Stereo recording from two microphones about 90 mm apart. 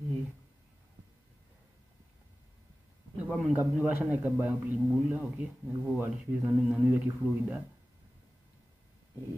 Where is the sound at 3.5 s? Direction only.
25° right (ahead or behind).